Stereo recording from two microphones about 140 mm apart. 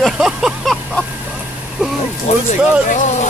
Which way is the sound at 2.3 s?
60° left (ahead or behind).